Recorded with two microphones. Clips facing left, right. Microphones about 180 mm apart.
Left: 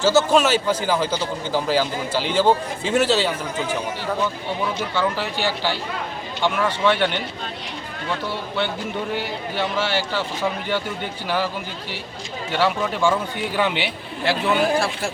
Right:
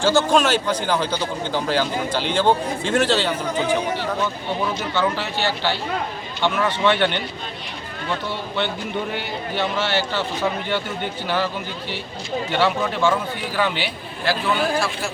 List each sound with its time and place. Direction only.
0.0 s a man's voice: 5° left (ahead or behind)
4.9 s a man's voice: 10° left (ahead or behind)
9.1 s a man's voice: 10° left (ahead or behind)
12.5 s a man's voice: 10° left (ahead or behind); by 14.8 s 25° left (ahead or behind)